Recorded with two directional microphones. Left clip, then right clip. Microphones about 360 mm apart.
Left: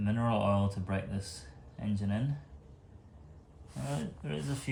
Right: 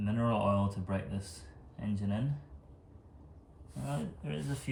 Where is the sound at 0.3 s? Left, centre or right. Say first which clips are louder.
Left 1 dB; left.